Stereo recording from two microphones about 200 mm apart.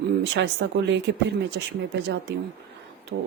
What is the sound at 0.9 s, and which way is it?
Speech, 60° right (ahead or behind).